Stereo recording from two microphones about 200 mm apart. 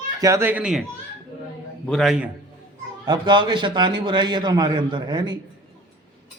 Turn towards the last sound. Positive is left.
turn(degrees=-20)  # may be behind; listen again after turning